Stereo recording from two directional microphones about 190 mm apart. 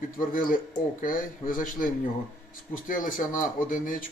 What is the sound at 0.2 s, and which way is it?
A man's voice, 45° left (ahead or behind).